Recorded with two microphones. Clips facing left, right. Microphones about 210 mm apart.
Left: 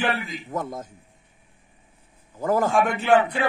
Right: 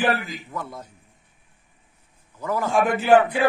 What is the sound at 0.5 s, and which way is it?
Speech, 45° left (ahead or behind).